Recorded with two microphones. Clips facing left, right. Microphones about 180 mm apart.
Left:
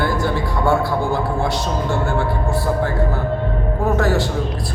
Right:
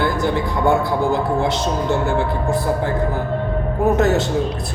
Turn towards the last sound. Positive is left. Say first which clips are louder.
# right 2 dB
turn(degrees=-20)  # may be behind; listen again after turning